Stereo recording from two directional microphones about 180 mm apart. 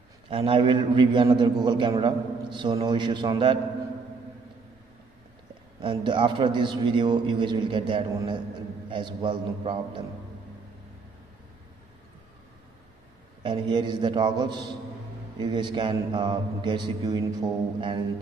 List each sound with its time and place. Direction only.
0.3 s a man's voice: 30° right (ahead or behind)
5.8 s a man's voice: 25° right (ahead or behind)
13.4 s a man's voice: 25° right (ahead or behind)